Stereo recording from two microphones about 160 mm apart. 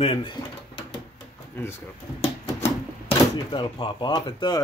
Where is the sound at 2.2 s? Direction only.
40° left (ahead or behind).